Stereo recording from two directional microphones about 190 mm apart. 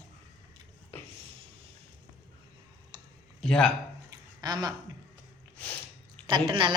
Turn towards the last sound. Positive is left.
turn(degrees=-25)  # may be behind; listen again after turning